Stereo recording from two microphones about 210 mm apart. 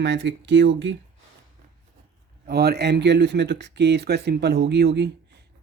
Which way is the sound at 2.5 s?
50° right (ahead or behind).